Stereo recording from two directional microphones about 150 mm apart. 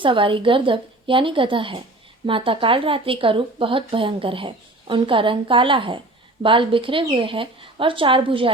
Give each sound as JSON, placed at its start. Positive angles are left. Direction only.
{"t": 0.0, "sound": "a woman's voice", "side_deg": -35}